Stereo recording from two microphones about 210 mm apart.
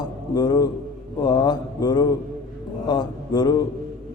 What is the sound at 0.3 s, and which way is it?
Mantra, 20° left (ahead or behind).